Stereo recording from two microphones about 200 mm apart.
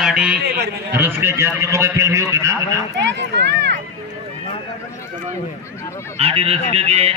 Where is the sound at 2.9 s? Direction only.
60° right (ahead or behind).